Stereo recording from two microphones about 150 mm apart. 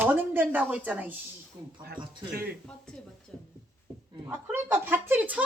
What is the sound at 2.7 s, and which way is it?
Speech, 5° left (ahead or behind).